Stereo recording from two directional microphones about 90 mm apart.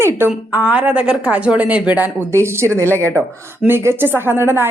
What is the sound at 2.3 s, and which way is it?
A woman's voice, 30° right (ahead or behind).